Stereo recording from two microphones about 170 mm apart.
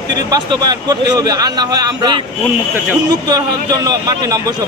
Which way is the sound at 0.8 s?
25° right (ahead or behind).